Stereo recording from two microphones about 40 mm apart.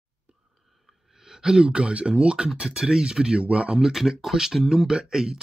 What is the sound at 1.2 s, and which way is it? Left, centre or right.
Speech, centre.